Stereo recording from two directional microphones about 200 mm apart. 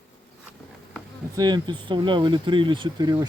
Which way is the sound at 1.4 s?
20° right (ahead or behind).